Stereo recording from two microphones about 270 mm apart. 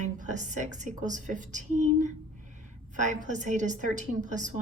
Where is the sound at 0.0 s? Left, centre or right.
Right.